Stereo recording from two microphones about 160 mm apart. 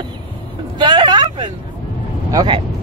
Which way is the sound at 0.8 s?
30° right (ahead or behind).